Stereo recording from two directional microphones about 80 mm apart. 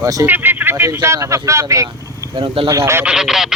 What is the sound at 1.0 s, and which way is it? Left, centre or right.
Speech, right.